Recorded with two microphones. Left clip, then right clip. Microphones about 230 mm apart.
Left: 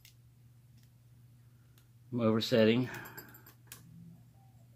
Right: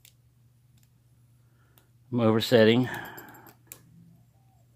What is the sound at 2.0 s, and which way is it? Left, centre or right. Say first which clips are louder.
Speech: right 7 dB; right.